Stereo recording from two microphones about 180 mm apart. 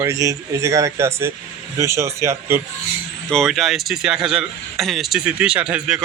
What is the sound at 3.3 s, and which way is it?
Speech, centre (ahead or behind).